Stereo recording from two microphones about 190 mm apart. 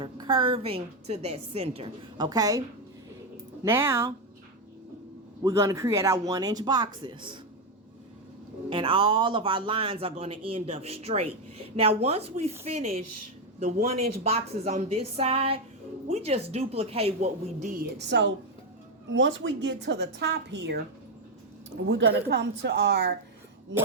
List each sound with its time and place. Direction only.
0.0 s speech: 25° right (ahead or behind)
5.4 s speech: 15° right (ahead or behind)
8.7 s a woman's voice: 25° right (ahead or behind)
17.9 s a woman's voice: 65° right (ahead or behind)
21.8 s a woman's voice: 70° right (ahead or behind)